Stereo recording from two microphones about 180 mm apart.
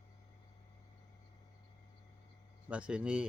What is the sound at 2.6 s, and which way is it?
Speech, 5° right (ahead or behind).